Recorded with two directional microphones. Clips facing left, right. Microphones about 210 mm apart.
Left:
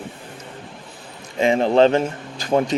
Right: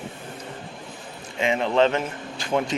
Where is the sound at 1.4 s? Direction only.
35° left (ahead or behind).